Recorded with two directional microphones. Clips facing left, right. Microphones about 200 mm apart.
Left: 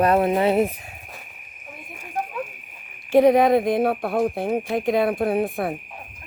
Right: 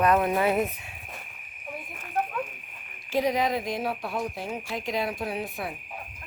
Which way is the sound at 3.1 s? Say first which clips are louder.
Left 10 dB; 60° left (ahead or behind).